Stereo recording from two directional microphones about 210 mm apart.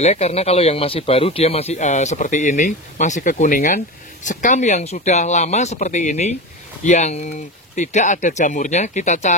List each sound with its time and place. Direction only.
0.0 s speech: 30° left (ahead or behind)